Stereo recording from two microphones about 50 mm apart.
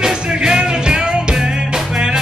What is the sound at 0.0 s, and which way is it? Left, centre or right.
Music, centre.